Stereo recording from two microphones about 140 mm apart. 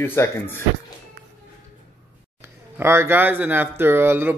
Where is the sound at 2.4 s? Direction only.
20° right (ahead or behind).